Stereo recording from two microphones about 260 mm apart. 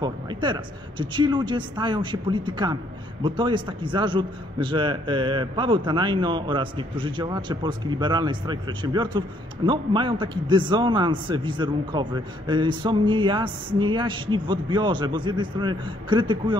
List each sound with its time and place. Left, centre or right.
0.0 s speech: centre